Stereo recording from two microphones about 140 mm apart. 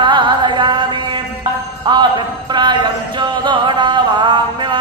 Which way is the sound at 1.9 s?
35° right (ahead or behind).